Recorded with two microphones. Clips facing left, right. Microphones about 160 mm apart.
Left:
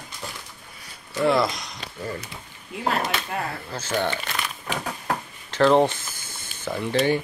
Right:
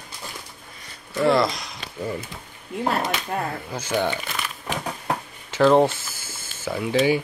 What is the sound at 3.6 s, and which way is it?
Speech, 10° right (ahead or behind).